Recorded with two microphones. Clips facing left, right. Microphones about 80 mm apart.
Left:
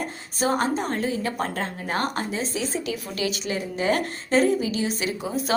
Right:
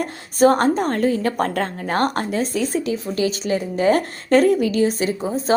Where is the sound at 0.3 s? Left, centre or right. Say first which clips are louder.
Right 8 dB; right.